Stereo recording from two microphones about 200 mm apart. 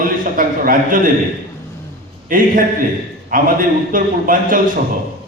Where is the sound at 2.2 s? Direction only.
45° right (ahead or behind).